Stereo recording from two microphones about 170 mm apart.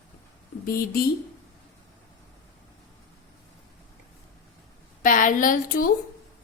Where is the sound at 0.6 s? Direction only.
60° left (ahead or behind).